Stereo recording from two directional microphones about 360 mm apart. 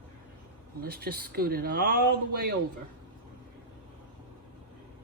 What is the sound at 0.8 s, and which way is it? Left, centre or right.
Speech, right.